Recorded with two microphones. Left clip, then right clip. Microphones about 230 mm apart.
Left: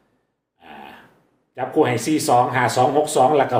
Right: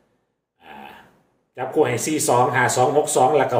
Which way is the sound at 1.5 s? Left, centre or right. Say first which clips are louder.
Left 1 dB; centre.